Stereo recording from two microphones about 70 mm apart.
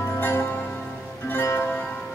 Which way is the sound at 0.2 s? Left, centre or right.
Left.